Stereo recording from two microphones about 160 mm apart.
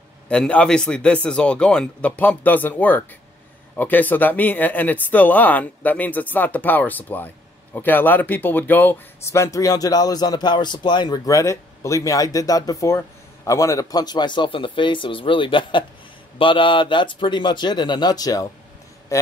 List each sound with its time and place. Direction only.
0.3 s speech: 10° left (ahead or behind); by 18.5 s 25° left (ahead or behind)